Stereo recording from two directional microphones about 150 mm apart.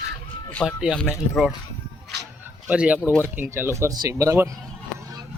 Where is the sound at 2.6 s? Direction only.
10° right (ahead or behind).